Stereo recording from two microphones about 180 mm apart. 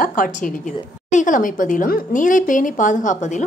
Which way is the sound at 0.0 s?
50° left (ahead or behind).